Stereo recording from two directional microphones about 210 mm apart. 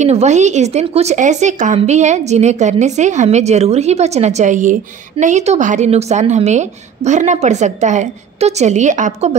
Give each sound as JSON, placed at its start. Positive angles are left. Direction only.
{"t": 0.0, "sound": "a woman's voice", "side_deg": -35}